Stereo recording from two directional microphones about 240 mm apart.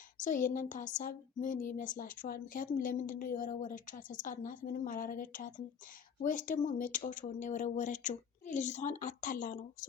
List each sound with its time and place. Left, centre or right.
0.2 s speech: left